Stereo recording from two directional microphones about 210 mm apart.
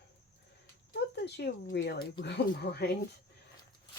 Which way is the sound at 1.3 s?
50° left (ahead or behind).